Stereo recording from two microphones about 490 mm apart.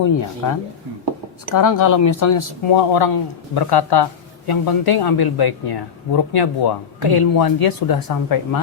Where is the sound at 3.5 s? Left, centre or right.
Left.